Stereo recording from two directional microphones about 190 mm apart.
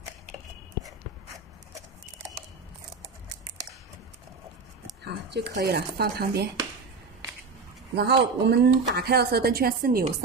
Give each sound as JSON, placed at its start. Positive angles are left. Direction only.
{"t": 5.0, "sound": "speech", "side_deg": -60}
{"t": 7.9, "sound": "speech", "side_deg": -60}